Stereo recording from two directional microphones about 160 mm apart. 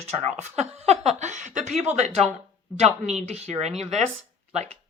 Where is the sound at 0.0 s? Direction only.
45° right (ahead or behind).